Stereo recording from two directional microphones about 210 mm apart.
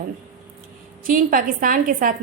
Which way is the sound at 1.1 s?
40° right (ahead or behind).